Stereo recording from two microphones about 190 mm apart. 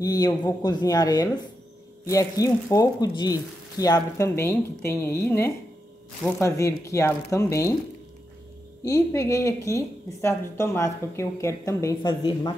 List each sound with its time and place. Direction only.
0.0 s a woman's voice: 20° left (ahead or behind)
8.8 s a woman's voice: 15° left (ahead or behind)